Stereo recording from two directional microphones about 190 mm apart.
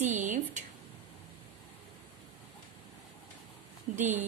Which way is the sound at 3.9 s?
40° right (ahead or behind).